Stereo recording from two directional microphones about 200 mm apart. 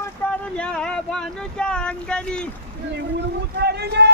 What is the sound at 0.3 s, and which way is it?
Speech, 5° left (ahead or behind).